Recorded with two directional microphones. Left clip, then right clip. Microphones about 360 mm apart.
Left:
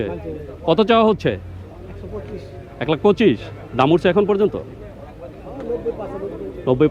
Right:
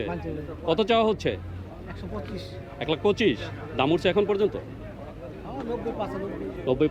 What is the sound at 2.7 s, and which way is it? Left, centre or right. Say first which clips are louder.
A man's voice: left 8 dB; left.